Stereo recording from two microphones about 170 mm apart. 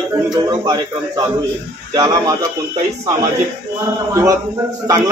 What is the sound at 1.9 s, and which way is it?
Speech, 20° right (ahead or behind).